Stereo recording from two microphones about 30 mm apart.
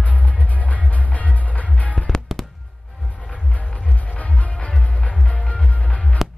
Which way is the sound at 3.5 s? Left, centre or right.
Left.